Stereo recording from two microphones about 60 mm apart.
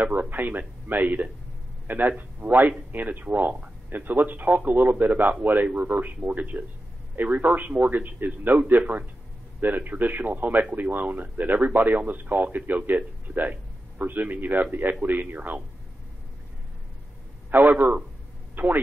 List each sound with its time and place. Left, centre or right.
0.0 s a man's voice: right
17.5 s speech: right